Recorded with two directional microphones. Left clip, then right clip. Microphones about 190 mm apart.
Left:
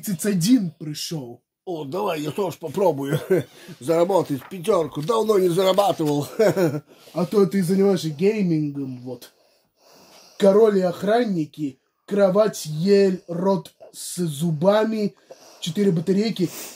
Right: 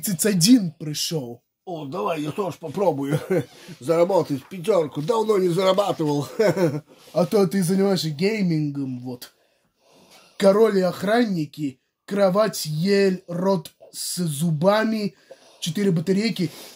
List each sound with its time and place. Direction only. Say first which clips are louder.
0.0 s speech: right 3 dB; 55° right (ahead or behind)
1.7 s speech: left 1 dB; 20° left (ahead or behind)
7.2 s speech: even; 55° right (ahead or behind)
10.3 s speech: left 1 dB; 60° right (ahead or behind)